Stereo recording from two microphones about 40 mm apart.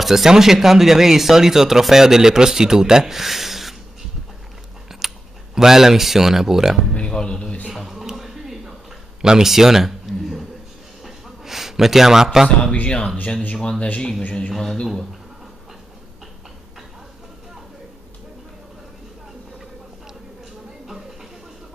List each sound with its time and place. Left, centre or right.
0.0 s speech: centre
5.0 s speech: centre
6.9 s a man's voice: left
7.7 s a sound: centre
9.2 s speech: centre
11.1 s a sound: centre
12.8 s a man's voice: left
14.5 s a man's voice: centre